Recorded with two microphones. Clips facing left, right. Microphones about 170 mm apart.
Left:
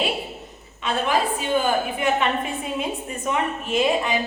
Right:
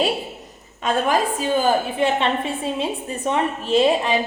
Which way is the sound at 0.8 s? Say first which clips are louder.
Right 3 dB; 45° right (ahead or behind).